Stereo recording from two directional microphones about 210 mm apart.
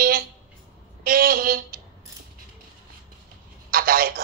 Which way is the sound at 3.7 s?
45° right (ahead or behind).